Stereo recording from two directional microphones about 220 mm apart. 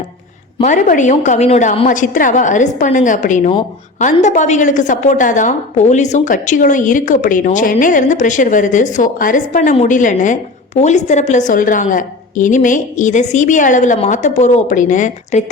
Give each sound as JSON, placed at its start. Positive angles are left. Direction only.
{"t": 0.6, "sound": "a woman's voice", "side_deg": 35}